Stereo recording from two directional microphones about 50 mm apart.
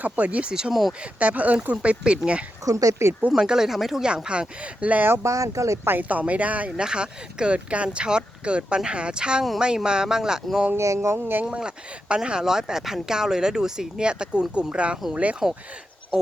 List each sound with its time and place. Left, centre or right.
0.0 s speech: right
0.7 s speech: centre
1.0 s speech: right
2.7 s speech: right
3.3 s speech: centre
4.0 s speech: centre
5.2 s speech: right
6.0 s speech: right; by 10.6 s centre
10.8 s a sound: right
11.4 s speech: right
16.1 s a sound: centre